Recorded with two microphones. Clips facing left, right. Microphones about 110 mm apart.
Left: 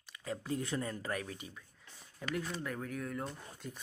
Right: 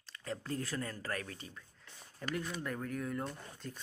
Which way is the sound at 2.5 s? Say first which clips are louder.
Right 1 dB; centre (ahead or behind).